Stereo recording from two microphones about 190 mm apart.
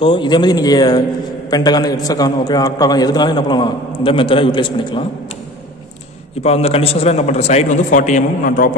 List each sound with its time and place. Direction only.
0.0 s a man's voice: 25° left (ahead or behind)
6.4 s a man's voice: 30° left (ahead or behind)